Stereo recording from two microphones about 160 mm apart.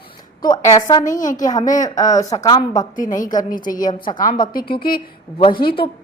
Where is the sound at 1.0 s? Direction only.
55° left (ahead or behind).